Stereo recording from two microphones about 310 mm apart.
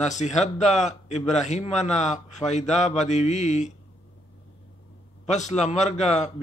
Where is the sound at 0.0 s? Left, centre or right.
Left.